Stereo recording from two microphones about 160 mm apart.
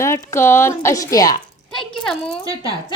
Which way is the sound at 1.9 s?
5° left (ahead or behind).